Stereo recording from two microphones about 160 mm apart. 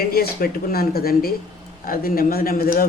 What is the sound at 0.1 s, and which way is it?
Speech, 70° left (ahead or behind).